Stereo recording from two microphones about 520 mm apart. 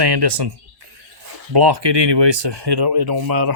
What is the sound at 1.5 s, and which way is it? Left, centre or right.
Speech, right.